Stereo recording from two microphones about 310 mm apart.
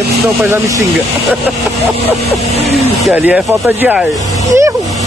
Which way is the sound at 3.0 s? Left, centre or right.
Centre.